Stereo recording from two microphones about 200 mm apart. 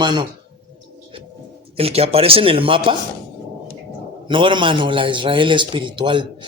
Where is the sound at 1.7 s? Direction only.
30° right (ahead or behind).